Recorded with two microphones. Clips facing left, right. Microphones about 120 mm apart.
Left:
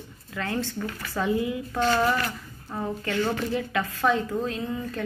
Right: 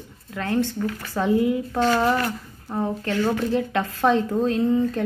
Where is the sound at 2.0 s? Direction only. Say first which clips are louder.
Right 3 dB; 20° right (ahead or behind).